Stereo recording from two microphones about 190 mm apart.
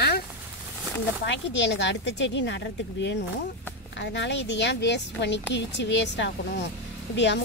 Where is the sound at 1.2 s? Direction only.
70° left (ahead or behind).